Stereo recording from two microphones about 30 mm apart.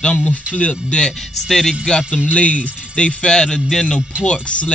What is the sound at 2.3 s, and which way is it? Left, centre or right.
Speech, left.